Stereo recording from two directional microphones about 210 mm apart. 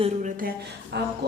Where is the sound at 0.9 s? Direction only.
55° right (ahead or behind).